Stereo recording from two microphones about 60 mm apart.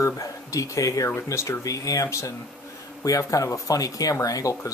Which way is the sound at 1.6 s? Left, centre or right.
Left.